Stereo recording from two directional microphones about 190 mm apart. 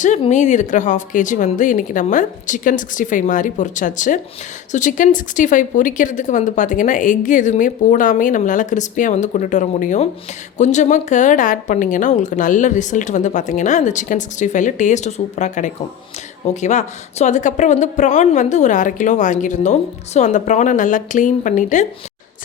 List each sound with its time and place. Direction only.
0.0 s a woman's voice: 40° left (ahead or behind)